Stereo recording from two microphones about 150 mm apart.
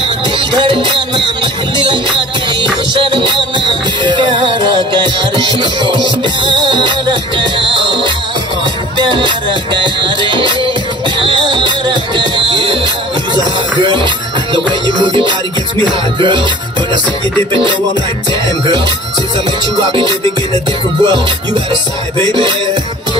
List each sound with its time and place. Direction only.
0.0 s music: 35° right (ahead or behind)
2.9 s music: 30° right (ahead or behind)
20.5 s music: 30° right (ahead or behind)